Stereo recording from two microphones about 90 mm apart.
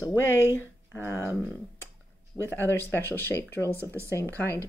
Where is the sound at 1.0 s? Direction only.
30° left (ahead or behind).